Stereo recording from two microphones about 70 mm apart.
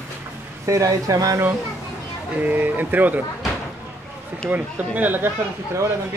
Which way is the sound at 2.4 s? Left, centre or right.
Right.